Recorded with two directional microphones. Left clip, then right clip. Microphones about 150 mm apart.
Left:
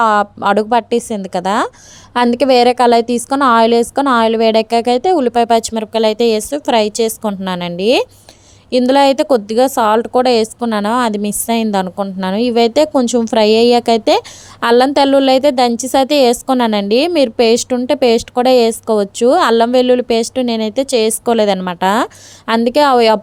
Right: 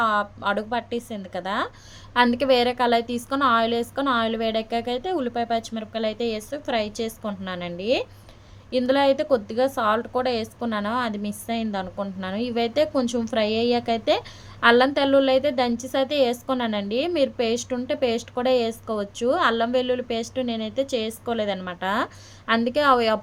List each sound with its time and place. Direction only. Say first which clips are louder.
0.0 s a woman's voice: left 10 dB; 40° left (ahead or behind)
2.1 s a woman's voice: left 8 dB; 35° left (ahead or behind)
5.4 s a woman's voice: left 13 dB; 50° left (ahead or behind); by 23.2 s 30° left (ahead or behind)